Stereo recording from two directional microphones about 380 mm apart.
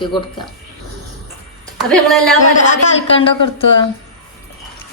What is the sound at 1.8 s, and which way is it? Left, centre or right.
Speech, centre.